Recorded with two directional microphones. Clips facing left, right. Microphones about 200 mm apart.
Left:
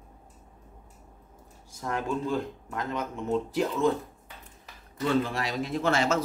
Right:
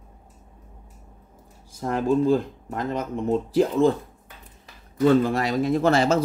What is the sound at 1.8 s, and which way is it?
Speech, 35° right (ahead or behind).